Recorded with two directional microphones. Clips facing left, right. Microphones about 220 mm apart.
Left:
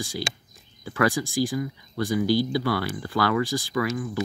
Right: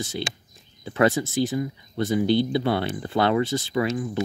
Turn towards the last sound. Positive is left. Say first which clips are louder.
# right 2 dB
turn(degrees=-25)  # may be behind; listen again after turning